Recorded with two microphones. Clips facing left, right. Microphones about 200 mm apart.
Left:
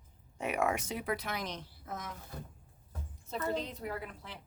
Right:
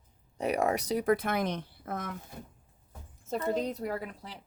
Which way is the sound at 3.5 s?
45° right (ahead or behind).